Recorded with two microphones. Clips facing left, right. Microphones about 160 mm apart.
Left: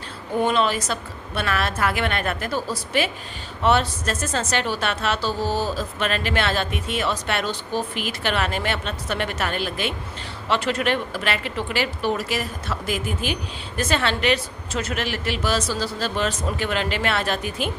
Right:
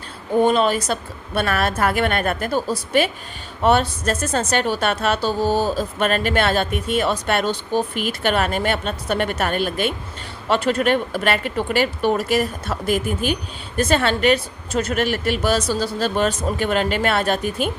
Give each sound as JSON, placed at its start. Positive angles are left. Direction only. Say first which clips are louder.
{"t": 0.4, "sound": "a woman's voice", "louder": "right 3 dB", "side_deg": -45}
{"t": 3.6, "sound": "a woman's voice", "louder": "right 3 dB", "side_deg": -50}